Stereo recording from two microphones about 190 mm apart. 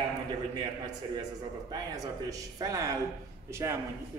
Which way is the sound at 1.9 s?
20° right (ahead or behind).